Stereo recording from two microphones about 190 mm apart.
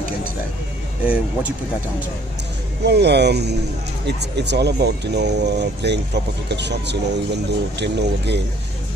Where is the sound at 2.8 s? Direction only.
60° right (ahead or behind).